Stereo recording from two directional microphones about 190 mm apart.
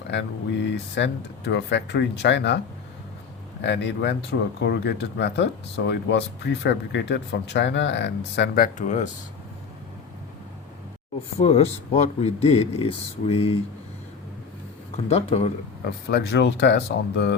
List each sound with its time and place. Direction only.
0.1 s speech: 65° left (ahead or behind)
3.6 s speech: 65° left (ahead or behind); by 9.0 s 40° left (ahead or behind)
11.3 s speech: 30° left (ahead or behind)
14.9 s speech: 35° left (ahead or behind)
16.0 s speech: 60° left (ahead or behind)